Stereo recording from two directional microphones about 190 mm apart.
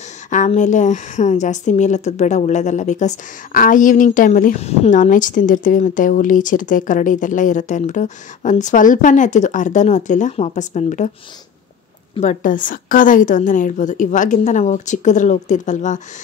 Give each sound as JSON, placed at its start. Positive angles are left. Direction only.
{"t": 0.3, "sound": "a woman's voice", "side_deg": 40}
{"t": 12.2, "sound": "a woman's voice", "side_deg": 40}